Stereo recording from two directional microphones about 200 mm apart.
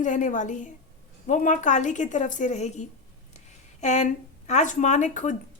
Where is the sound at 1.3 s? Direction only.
40° left (ahead or behind).